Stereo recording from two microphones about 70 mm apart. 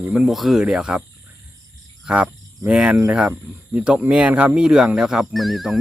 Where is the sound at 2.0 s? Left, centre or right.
Right; by 5.8 s centre.